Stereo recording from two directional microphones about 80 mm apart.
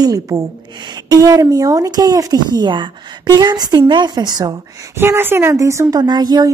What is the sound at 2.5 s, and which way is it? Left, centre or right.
A woman's voice, right.